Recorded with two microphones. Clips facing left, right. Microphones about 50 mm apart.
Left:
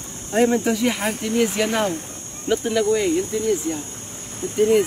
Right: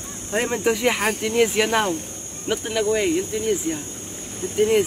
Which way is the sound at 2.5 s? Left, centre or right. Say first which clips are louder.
Left 4 dB; centre.